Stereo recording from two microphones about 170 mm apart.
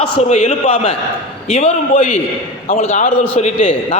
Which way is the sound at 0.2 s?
40° left (ahead or behind).